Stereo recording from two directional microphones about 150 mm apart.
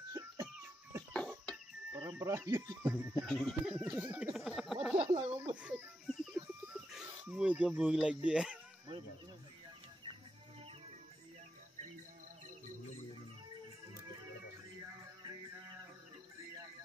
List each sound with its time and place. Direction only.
1.1 s music: 5° left (ahead or behind)
1.9 s speech: 15° right (ahead or behind)
3.3 s speech: centre (ahead or behind)
3.7 s speech: 10° right (ahead or behind)
4.9 s speech: 30° right (ahead or behind)
5.6 s music: 10° right (ahead or behind)
14.8 s music: 20° right (ahead or behind)